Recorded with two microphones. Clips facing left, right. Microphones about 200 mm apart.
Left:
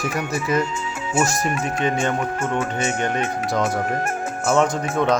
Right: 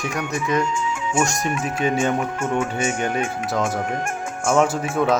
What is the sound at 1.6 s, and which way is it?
Speech, 10° right (ahead or behind).